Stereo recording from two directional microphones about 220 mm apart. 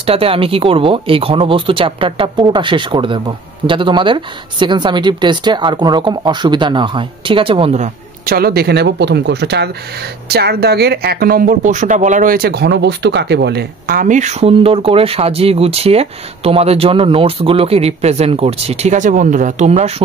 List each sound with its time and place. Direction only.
0.0 s speech: 25° right (ahead or behind)
8.4 s speech: 45° right (ahead or behind)